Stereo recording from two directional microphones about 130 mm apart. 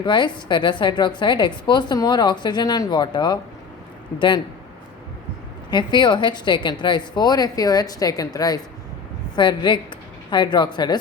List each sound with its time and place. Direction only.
0.0 s a woman's voice: 35° left (ahead or behind)
5.7 s a woman's voice: 35° left (ahead or behind)